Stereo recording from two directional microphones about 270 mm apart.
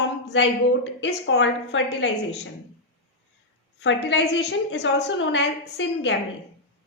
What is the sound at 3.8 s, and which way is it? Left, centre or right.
A woman's voice, left.